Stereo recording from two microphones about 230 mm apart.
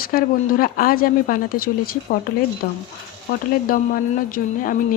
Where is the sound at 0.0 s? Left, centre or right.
Left.